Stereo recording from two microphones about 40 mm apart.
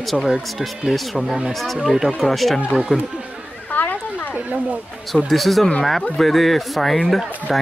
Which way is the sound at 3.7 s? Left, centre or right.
Left.